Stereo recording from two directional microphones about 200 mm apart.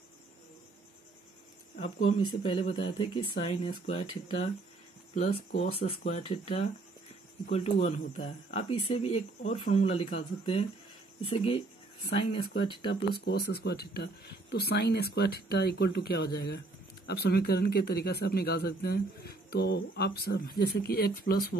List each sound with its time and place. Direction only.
1.8 s speech: 35° left (ahead or behind)
5.1 s speech: 35° left (ahead or behind)
13.1 s speech: 55° left (ahead or behind)